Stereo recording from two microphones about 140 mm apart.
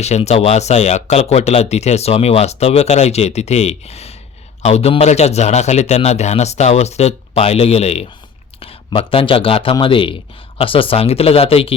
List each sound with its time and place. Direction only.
0.0 s speech: 50° left (ahead or behind)